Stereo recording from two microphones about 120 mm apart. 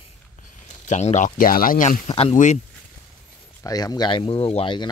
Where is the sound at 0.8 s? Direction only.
70° left (ahead or behind).